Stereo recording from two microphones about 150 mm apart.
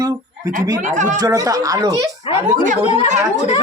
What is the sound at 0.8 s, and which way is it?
Speech, 55° right (ahead or behind).